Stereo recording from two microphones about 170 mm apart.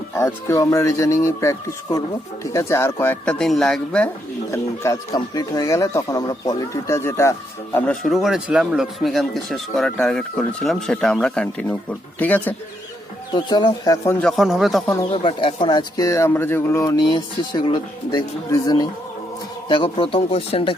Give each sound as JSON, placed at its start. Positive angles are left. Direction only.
{"t": 0.2, "sound": "speech", "side_deg": 15}
{"t": 4.5, "sound": "speech", "side_deg": 20}
{"t": 13.3, "sound": "speech", "side_deg": 25}
{"t": 14.2, "sound": "speech", "side_deg": 0}
{"t": 15.1, "sound": "speech", "side_deg": 30}